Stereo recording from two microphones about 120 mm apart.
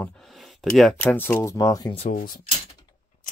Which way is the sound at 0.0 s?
5° left (ahead or behind).